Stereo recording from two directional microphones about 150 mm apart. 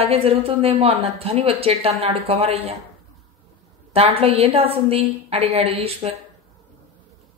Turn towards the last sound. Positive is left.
turn(degrees=-45)  # may be behind; listen again after turning